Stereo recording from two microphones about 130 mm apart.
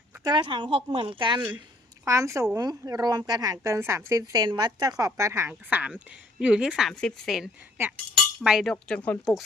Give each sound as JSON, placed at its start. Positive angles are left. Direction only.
{"t": 0.3, "sound": "a woman's voice", "side_deg": -40}
{"t": 2.0, "sound": "a woman's voice", "side_deg": -25}
{"t": 8.4, "sound": "chink", "side_deg": -5}
{"t": 8.7, "sound": "speech", "side_deg": 10}